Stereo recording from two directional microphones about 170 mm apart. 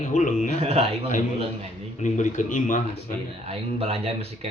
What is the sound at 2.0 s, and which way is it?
Speech, 45° left (ahead or behind).